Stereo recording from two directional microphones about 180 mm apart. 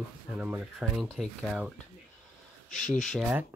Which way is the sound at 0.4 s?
5° right (ahead or behind).